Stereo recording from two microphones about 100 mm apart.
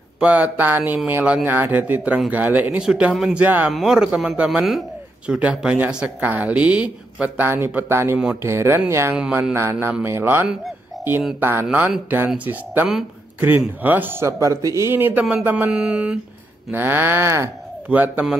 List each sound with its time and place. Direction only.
0.2 s speech: 15° right (ahead or behind)
2.8 s speech: 5° right (ahead or behind)
3.3 s speech: 15° right (ahead or behind)
3.7 s a man's voice: 5° right (ahead or behind); by 11.6 s 25° right (ahead or behind)
11.6 s speech: 5° right (ahead or behind)
13.4 s a man's voice: 20° right (ahead or behind)
14.2 s a man's voice: 30° right (ahead or behind); by 16.2 s 10° right (ahead or behind)
16.7 s a man's voice: 20° right (ahead or behind)